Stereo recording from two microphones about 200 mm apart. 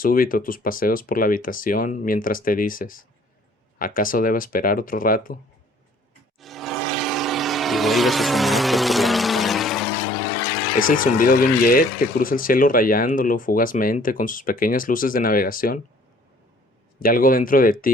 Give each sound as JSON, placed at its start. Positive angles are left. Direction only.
{"t": 0.0, "sound": "speech", "side_deg": 45}
{"t": 6.4, "sound": "vehicle", "side_deg": 0}
{"t": 10.8, "sound": "speech", "side_deg": 45}
{"t": 17.0, "sound": "speech", "side_deg": 45}